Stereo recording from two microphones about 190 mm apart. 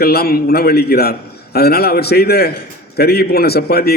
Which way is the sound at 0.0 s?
55° left (ahead or behind).